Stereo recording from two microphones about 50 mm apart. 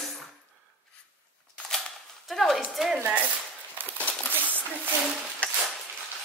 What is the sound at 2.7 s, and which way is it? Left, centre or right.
Speech, centre.